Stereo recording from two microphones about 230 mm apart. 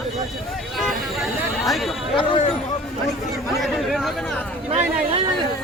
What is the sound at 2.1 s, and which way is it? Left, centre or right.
Speech, left.